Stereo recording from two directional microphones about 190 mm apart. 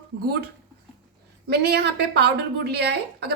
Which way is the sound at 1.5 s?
60° right (ahead or behind).